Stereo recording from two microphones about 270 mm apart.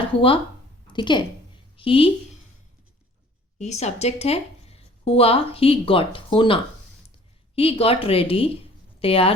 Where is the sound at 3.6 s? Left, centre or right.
Left.